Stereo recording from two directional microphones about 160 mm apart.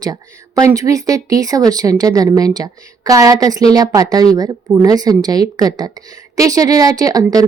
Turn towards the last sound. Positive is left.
turn(degrees=-25)  # may be behind; listen again after turning